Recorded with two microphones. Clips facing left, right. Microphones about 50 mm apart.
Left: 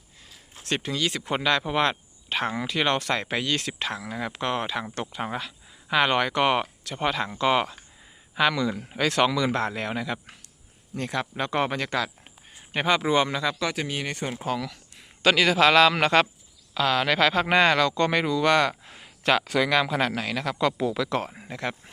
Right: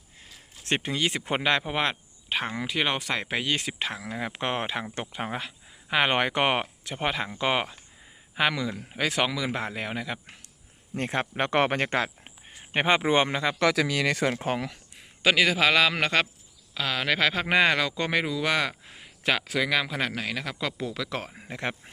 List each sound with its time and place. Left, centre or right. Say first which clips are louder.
0.6 s speech: even; right; by 4.3 s centre
4.3 s speech: left 2 dB; right
8.7 s speech: left 3 dB; centre
9.0 s speech: left 4 dB; centre
10.9 s speech: right 1 dB; right
13.6 s speech: right 5 dB; right
14.3 s speech: even; right
15.2 s speech: left 2 dB; centre
21.6 s speech: left 1 dB; right